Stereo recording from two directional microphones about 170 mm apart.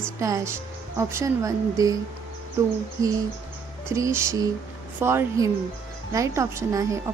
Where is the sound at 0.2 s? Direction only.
20° right (ahead or behind).